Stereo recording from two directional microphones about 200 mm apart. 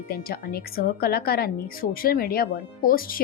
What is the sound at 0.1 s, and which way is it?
Speech, 50° left (ahead or behind).